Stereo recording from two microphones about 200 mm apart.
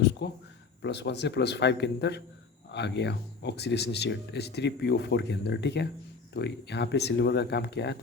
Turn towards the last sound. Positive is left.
turn(degrees=55)  # may be behind; listen again after turning